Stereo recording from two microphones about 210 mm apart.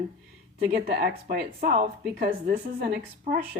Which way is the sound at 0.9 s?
45° right (ahead or behind).